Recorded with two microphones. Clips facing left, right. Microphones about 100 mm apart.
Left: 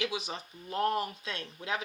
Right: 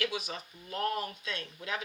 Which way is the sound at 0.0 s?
25° left (ahead or behind).